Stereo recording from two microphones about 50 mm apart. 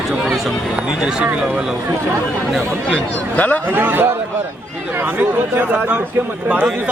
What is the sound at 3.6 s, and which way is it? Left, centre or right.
A man's voice, right.